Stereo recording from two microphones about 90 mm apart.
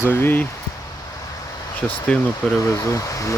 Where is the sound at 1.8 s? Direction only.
15° left (ahead or behind).